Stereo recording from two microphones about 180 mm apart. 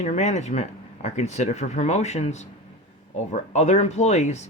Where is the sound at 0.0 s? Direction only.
40° left (ahead or behind).